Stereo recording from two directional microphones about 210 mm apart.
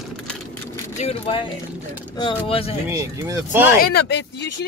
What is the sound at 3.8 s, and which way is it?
Speech, 50° left (ahead or behind).